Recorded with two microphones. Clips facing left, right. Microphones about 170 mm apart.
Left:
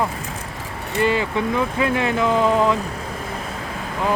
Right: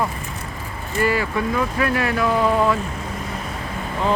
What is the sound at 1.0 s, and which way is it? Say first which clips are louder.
Speech: left 1 dB; 20° left (ahead or behind).